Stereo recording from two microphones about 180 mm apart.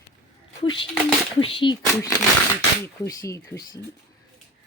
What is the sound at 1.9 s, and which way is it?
Speech, 15° left (ahead or behind).